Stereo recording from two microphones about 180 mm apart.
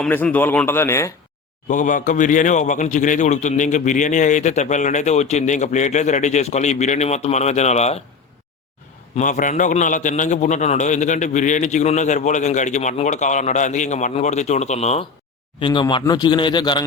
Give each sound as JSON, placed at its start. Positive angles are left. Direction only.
{"t": 0.0, "sound": "speech", "side_deg": 10}
{"t": 1.6, "sound": "a man's voice", "side_deg": 45}
{"t": 9.1, "sound": "a man's voice", "side_deg": 45}